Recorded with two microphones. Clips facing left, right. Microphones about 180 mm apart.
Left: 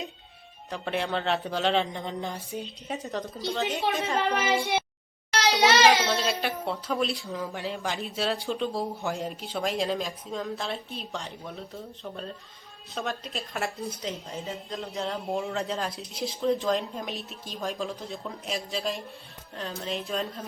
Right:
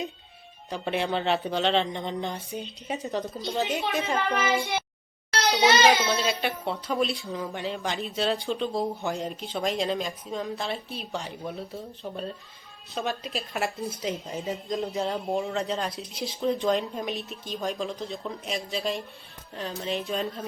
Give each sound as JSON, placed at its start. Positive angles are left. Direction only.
{"t": 0.7, "sound": "speech", "side_deg": 0}
{"t": 3.4, "sound": "a woman's voice", "side_deg": -15}
{"t": 5.5, "sound": "speech", "side_deg": 0}
{"t": 12.9, "sound": "speech", "side_deg": 0}